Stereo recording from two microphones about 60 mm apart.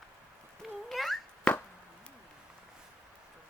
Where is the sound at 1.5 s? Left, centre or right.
Centre.